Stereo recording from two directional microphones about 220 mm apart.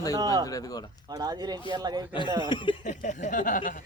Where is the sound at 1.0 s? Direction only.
20° right (ahead or behind).